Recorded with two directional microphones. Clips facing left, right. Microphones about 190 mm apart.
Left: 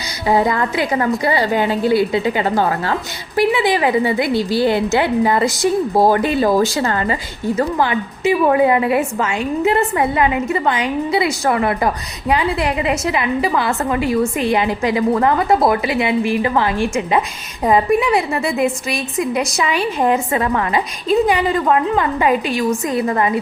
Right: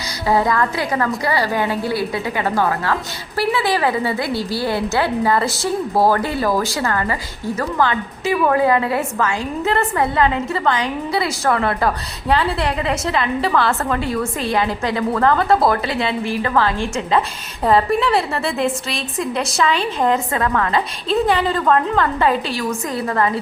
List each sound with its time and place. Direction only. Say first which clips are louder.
0.3 s a woman's voice: left 1 dB; 20° left (ahead or behind)